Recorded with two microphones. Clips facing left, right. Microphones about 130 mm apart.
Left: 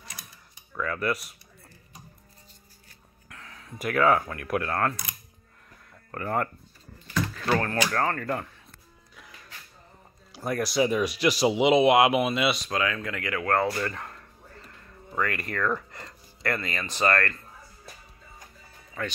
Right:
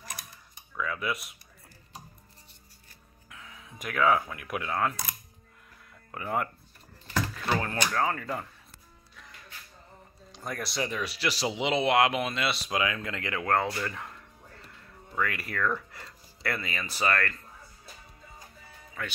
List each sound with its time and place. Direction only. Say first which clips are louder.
0.7 s speech: left 4 dB; 5° right (ahead or behind)
3.3 s speech: left 3 dB; 5° right (ahead or behind)
6.1 s speech: left 3 dB; 5° right (ahead or behind)
7.9 s speech: left 2 dB; 5° right (ahead or behind)
10.3 s speech: left 8 dB; 5° left (ahead or behind)
10.9 s speech: left 8 dB; 15° left (ahead or behind)
12.6 s speech: left 2 dB; 15° right (ahead or behind)
13.9 s music: left 2 dB; 10° right (ahead or behind)
15.1 s speech: left 2 dB; 5° right (ahead or behind)
19.0 s speech: left 5 dB; centre (ahead or behind)